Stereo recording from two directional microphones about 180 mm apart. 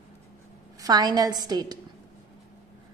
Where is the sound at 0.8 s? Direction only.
20° right (ahead or behind).